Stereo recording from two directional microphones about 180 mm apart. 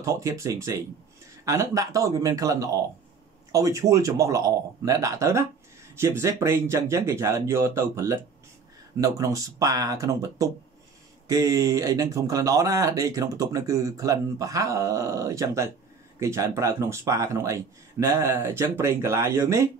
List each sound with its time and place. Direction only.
0.0 s speech: 15° right (ahead or behind)